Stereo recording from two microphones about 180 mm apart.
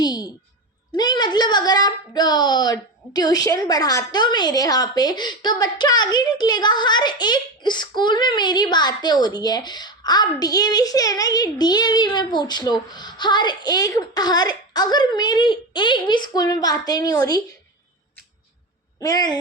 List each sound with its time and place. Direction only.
0.0 s a sound: 20° left (ahead or behind)
0.9 s a woman's voice: 25° left (ahead or behind)
18.9 s a woman's voice: 20° left (ahead or behind)